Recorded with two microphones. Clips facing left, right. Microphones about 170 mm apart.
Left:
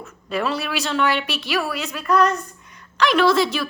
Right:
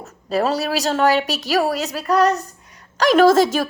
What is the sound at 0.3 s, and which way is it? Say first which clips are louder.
A woman's voice: right 4 dB; 40° right (ahead or behind).